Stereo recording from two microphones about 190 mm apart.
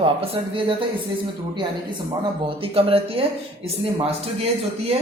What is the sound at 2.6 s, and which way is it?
Speech, 30° right (ahead or behind).